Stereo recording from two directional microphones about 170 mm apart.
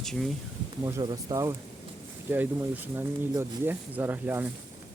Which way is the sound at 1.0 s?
20° right (ahead or behind).